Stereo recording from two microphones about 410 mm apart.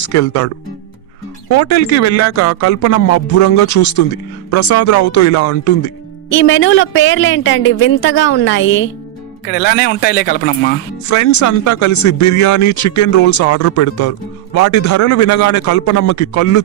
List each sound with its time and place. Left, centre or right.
0.1 s speech: left
6.3 s speech: left
11.1 s speech: left